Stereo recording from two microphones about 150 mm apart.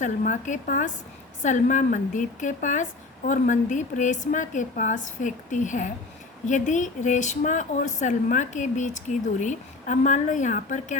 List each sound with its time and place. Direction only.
0.0 s speech: 55° left (ahead or behind)